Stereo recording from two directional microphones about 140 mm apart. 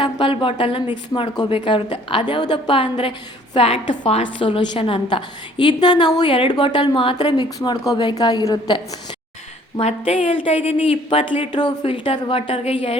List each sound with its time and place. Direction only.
0.0 s a woman's voice: 35° left (ahead or behind)